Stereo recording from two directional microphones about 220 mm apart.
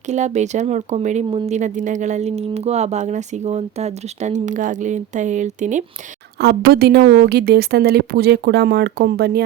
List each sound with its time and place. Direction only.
0.0 s speech: 30° right (ahead or behind)
6.4 s a woman's voice: 45° right (ahead or behind)